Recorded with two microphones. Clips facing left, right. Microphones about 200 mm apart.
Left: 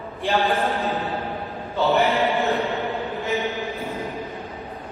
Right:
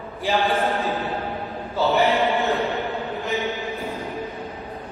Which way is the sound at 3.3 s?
Centre (ahead or behind).